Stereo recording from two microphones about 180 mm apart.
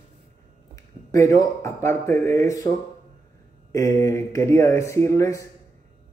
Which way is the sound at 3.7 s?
15° left (ahead or behind).